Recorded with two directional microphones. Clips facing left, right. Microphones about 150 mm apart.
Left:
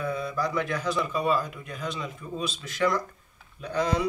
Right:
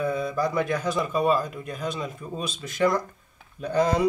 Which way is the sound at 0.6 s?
50° right (ahead or behind).